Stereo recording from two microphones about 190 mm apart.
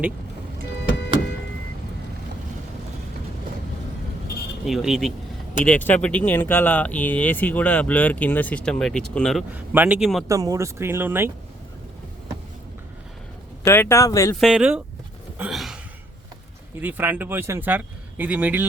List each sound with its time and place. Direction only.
0.8 s music: 65° left (ahead or behind)
4.6 s speech: centre (ahead or behind)
9.5 s speech: 10° right (ahead or behind)
10.2 s speech: 20° right (ahead or behind)
13.7 s speech: 15° left (ahead or behind)
14.3 s speech: 5° right (ahead or behind)
15.4 s sigh: centre (ahead or behind)
16.8 s speech: 10° right (ahead or behind)